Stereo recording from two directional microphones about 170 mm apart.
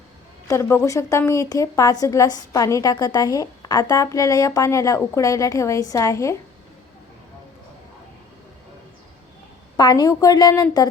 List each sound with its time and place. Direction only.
0.4 s a woman's voice: 15° left (ahead or behind)
9.7 s a woman's voice: 25° left (ahead or behind)